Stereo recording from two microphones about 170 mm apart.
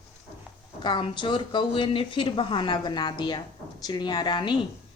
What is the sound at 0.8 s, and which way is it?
Speech, 25° left (ahead or behind).